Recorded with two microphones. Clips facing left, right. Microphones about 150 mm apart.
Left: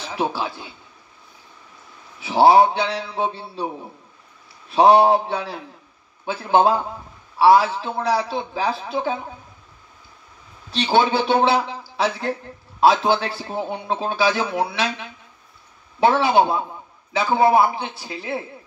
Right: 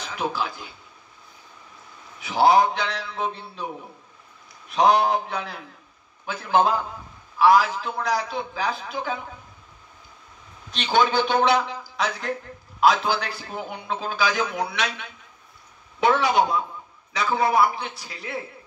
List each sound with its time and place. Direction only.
0.0 s speech: 30° left (ahead or behind)
2.1 s a man's voice: 30° left (ahead or behind)
4.6 s a man's voice: 30° left (ahead or behind)
10.8 s a man's voice: 30° left (ahead or behind)